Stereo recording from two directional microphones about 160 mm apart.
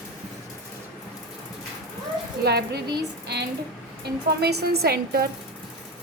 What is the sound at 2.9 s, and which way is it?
A woman's voice, 90° right.